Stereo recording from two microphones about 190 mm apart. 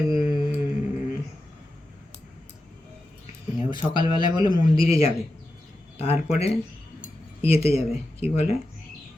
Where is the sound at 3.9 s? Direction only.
20° right (ahead or behind).